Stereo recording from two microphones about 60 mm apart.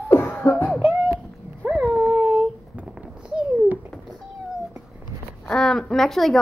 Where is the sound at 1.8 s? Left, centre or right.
Centre.